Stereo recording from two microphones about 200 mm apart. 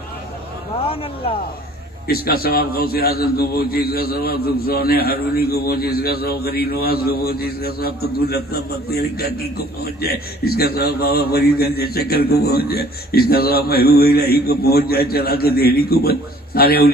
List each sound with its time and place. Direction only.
0.8 s speech: 30° left (ahead or behind)
2.0 s a man's voice: 50° left (ahead or behind)